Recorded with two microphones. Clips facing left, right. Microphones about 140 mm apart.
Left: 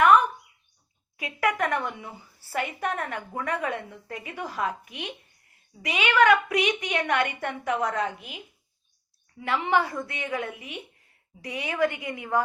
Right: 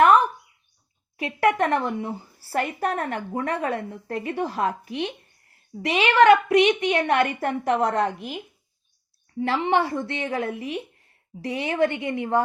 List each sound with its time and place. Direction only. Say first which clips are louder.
0.0 s bird: right 2 dB; 35° right (ahead or behind)
1.1 s a woman's voice: right 5 dB; 30° right (ahead or behind)
9.4 s a woman's voice: right 3 dB; 30° right (ahead or behind)